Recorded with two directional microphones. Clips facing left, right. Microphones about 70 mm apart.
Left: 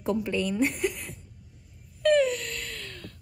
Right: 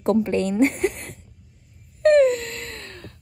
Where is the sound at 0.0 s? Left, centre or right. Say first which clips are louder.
Right 7 dB; right.